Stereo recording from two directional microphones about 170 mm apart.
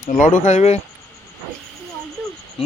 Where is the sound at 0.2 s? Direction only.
45° left (ahead or behind).